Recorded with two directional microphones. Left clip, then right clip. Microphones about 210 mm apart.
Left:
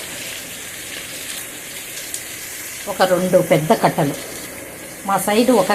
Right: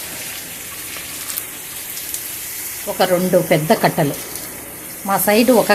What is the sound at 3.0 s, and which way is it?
Speech, 20° right (ahead or behind).